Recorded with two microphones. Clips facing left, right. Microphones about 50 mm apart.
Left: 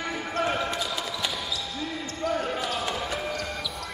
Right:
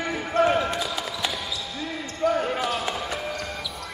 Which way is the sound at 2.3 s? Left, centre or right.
Right.